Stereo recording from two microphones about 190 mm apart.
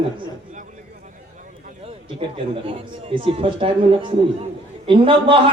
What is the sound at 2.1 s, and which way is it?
A man's voice, 30° right (ahead or behind).